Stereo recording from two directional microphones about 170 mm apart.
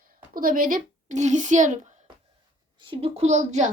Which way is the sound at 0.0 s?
55° right (ahead or behind).